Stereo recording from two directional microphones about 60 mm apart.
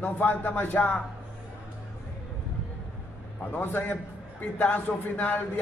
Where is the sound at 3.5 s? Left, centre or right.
Left.